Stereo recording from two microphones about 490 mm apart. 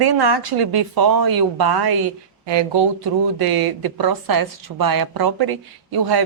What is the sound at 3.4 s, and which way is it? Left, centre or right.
A woman's voice, right.